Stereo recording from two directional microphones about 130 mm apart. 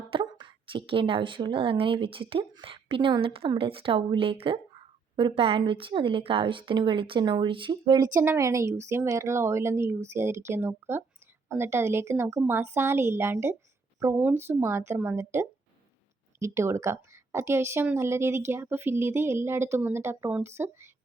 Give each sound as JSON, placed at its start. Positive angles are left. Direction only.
{"t": 0.1, "sound": "a woman's voice", "side_deg": -40}